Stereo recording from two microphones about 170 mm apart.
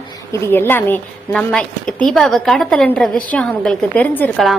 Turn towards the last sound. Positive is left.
turn(degrees=5)  # may be behind; listen again after turning